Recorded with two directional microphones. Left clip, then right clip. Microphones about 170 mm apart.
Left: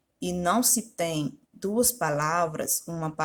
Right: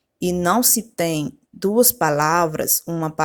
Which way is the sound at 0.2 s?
40° right (ahead or behind).